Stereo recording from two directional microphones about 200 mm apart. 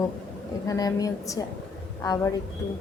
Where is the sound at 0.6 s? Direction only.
15° left (ahead or behind).